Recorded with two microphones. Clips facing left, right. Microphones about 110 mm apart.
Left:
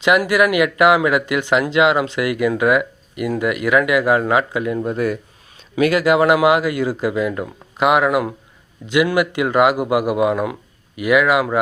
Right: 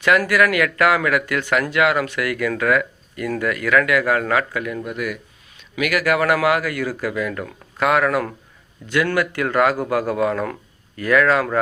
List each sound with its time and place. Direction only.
0.0 s a man's voice: 15° left (ahead or behind)